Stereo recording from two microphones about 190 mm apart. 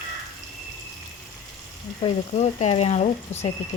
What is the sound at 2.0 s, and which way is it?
Speech, 35° left (ahead or behind).